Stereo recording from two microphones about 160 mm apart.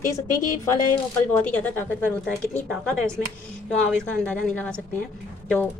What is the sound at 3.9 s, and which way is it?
Speech, 5° left (ahead or behind).